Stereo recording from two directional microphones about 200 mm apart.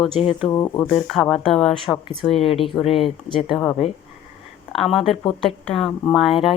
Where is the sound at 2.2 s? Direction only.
30° left (ahead or behind).